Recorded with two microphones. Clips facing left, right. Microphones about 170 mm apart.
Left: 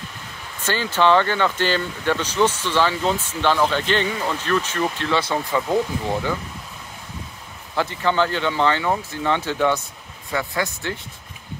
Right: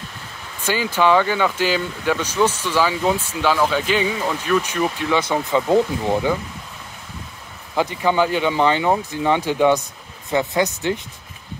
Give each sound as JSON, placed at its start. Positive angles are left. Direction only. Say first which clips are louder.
{"t": 0.6, "sound": "speech", "louder": "right 1 dB", "side_deg": -10}
{"t": 7.7, "sound": "speech", "louder": "right 2 dB", "side_deg": -15}